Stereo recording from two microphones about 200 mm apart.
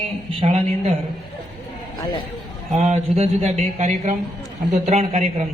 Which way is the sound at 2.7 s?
35° right (ahead or behind).